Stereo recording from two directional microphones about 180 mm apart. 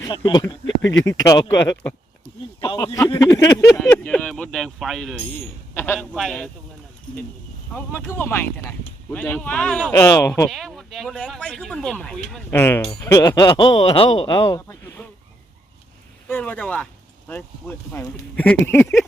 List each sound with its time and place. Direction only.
0.0 s a man's voice: 25° left (ahead or behind)
2.7 s speech: 15° left (ahead or behind)
4.0 s speech: 5° left (ahead or behind)
7.7 s speech: 10° left (ahead or behind)
10.0 s speech: 15° left (ahead or behind)
10.5 s speech: centre (ahead or behind)
16.3 s speech: 10° left (ahead or behind)